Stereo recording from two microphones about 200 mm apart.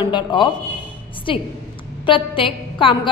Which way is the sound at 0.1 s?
25° left (ahead or behind).